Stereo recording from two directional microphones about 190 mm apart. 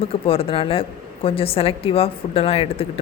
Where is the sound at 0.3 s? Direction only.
30° left (ahead or behind).